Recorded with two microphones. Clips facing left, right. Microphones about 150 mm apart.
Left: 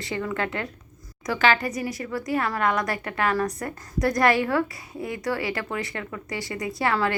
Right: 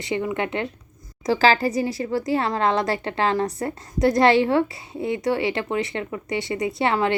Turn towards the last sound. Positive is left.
turn(degrees=-25)  # may be behind; listen again after turning